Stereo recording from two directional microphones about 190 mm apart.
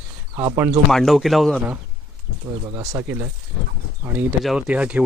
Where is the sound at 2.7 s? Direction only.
15° right (ahead or behind).